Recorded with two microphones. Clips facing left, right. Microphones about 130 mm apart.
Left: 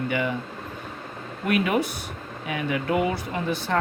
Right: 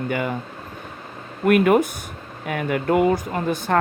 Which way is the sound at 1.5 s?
50° right (ahead or behind).